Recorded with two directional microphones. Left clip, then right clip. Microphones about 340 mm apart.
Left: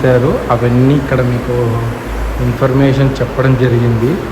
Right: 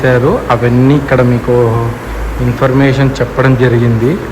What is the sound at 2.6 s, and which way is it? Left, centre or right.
Speech, centre.